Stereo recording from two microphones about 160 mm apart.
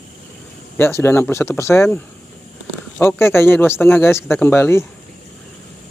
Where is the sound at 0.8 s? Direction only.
15° left (ahead or behind).